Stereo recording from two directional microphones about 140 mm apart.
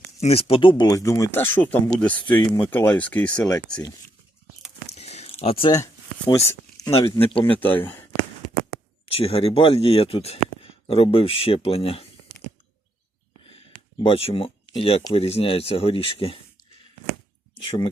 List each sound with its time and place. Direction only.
0.2 s speech: 45° left (ahead or behind); by 3.5 s 5° left (ahead or behind)
4.9 s a sound: 50° left (ahead or behind)
5.7 s a sound: 25° left (ahead or behind)
6.8 s speech: 20° left (ahead or behind)
7.2 s speech: 40° left (ahead or behind)
7.5 s speech: 10° left (ahead or behind)
9.0 s speech: 45° left (ahead or behind)
14.0 s speech: 45° left (ahead or behind)